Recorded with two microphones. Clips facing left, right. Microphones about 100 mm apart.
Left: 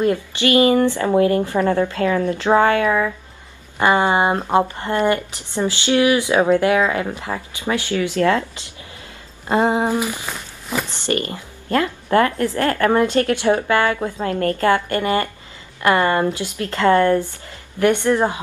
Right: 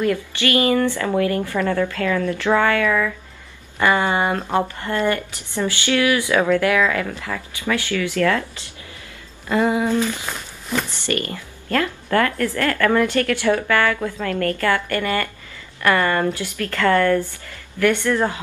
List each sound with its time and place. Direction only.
0.0 s speech: 25° left (ahead or behind)
10.2 s a sound: 5° left (ahead or behind)
10.9 s speech: 20° left (ahead or behind)